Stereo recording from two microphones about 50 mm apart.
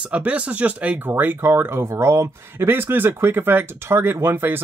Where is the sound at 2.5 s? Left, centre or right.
Right.